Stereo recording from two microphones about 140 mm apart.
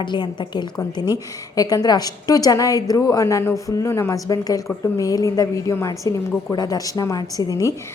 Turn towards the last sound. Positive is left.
turn(degrees=25)  # may be behind; listen again after turning